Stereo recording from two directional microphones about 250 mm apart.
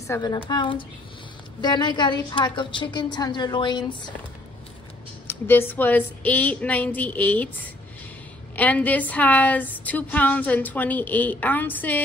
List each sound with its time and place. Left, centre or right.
0.0 s a woman's voice: centre
5.2 s a woman's voice: centre